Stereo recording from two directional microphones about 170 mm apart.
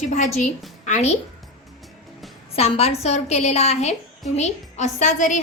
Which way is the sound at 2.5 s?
35° left (ahead or behind).